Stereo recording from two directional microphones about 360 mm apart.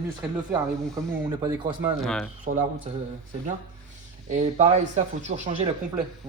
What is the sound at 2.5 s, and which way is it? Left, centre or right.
Speech, right.